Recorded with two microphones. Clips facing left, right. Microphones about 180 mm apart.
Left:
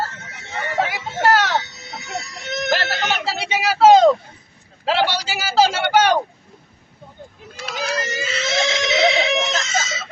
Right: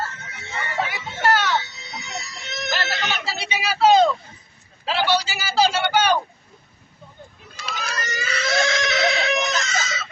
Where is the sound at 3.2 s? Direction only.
90° left.